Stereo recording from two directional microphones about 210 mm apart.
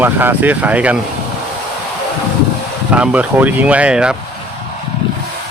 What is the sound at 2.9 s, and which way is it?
Speech, 5° right (ahead or behind).